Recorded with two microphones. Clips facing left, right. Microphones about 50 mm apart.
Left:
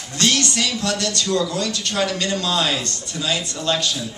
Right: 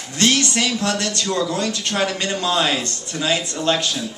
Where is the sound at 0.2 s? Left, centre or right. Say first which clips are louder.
Right 2 dB; right.